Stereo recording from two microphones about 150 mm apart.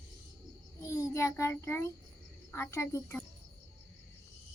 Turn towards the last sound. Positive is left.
turn(degrees=20)  # may be behind; listen again after turning